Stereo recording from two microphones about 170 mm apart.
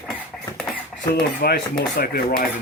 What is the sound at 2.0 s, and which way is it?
Speech, 55° left (ahead or behind).